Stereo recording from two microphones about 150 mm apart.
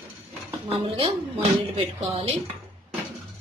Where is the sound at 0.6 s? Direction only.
40° right (ahead or behind).